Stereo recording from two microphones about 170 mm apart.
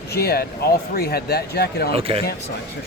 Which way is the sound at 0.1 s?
65° left (ahead or behind).